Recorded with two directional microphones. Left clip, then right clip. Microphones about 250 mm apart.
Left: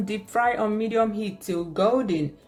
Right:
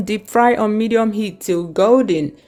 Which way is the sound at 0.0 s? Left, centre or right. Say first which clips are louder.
Right 9 dB; right.